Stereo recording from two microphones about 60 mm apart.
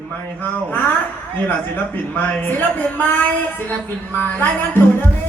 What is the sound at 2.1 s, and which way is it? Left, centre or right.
Speech, left.